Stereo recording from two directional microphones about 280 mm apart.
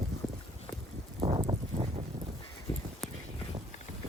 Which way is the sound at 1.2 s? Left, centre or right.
Centre.